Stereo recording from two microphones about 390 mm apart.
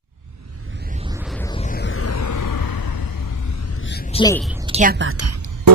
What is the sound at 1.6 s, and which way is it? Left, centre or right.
Music, left.